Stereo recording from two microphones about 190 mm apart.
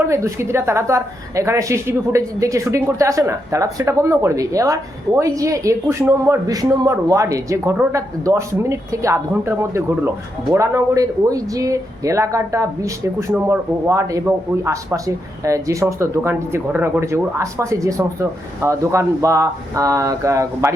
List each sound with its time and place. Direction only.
0.1 s a woman's voice: 15° right (ahead or behind)